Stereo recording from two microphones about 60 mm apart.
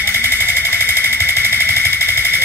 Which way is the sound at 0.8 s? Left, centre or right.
Right.